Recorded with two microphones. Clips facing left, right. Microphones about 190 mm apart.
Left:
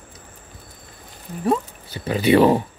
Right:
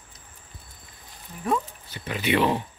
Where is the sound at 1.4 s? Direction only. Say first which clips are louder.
Left 5 dB; 35° left (ahead or behind).